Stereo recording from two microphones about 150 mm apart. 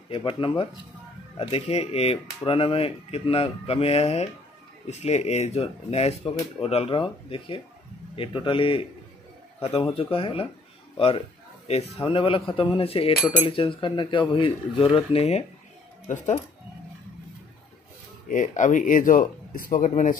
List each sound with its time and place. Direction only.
0.1 s speech: 35° left (ahead or behind)
16.1 s speech: 55° left (ahead or behind)
18.3 s speech: 55° left (ahead or behind)